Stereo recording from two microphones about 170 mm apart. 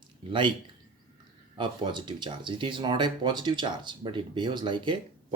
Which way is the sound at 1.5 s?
25° right (ahead or behind).